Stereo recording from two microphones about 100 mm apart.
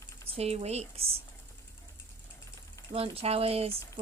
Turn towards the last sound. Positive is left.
turn(degrees=-80)